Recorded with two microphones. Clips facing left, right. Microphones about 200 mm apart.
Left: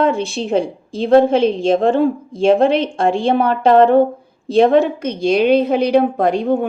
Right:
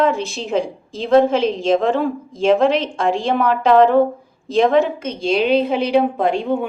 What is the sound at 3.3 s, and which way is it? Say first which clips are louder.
A woman's voice: left 1 dB; 30° left (ahead or behind).